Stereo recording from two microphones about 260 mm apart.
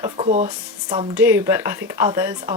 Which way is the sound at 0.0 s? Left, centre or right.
Right.